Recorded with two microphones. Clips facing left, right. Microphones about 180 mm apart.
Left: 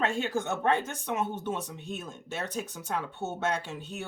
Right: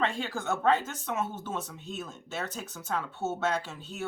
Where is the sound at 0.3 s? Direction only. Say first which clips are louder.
Right 3 dB; 15° left (ahead or behind).